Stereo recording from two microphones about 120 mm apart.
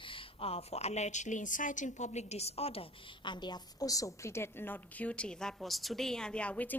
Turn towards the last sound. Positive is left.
turn(degrees=10)  # may be behind; listen again after turning